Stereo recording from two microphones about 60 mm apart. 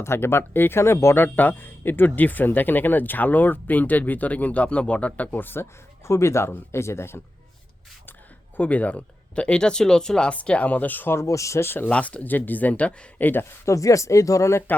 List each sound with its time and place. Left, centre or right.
0.0 s speech: left
6.1 s speech: left
8.5 s speech: left
11.1 s speech: left
11.6 s speech: left
11.9 s speech: left
13.7 s speech: left